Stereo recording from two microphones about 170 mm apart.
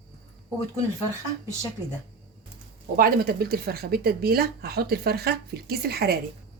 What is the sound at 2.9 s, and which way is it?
Speech, 60° right (ahead or behind).